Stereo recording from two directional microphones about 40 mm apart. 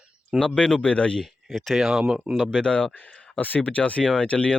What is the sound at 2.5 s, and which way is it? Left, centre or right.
Speech, left.